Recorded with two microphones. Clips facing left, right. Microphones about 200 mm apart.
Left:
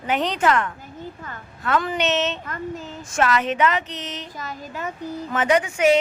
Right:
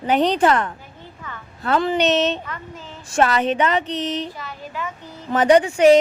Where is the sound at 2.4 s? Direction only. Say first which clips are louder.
Left 5 dB; 45° left (ahead or behind).